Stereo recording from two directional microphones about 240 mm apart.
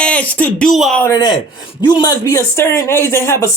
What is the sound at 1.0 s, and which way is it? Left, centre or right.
Speech, centre.